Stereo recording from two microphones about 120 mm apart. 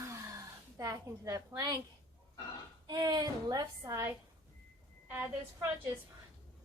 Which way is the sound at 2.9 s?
35° right (ahead or behind).